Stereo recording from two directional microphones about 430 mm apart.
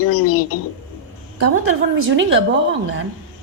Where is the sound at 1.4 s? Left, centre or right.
Right.